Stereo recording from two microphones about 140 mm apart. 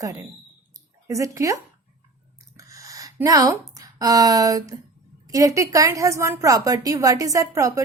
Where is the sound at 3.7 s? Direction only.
25° right (ahead or behind).